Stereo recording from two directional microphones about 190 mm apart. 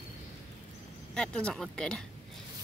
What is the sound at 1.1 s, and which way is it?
Speech, 5° left (ahead or behind).